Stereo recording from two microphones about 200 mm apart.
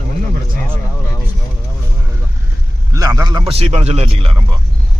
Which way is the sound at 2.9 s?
15° right (ahead or behind).